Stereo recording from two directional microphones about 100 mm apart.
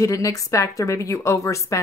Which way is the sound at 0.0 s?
35° left (ahead or behind).